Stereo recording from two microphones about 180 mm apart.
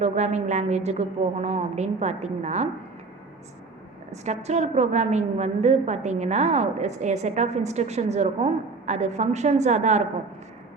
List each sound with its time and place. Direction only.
0.0 s a woman's voice: 40° right (ahead or behind)
4.1 s a woman's voice: 40° right (ahead or behind)